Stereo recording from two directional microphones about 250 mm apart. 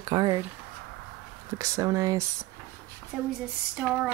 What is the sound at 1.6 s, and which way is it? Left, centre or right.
Speech, centre.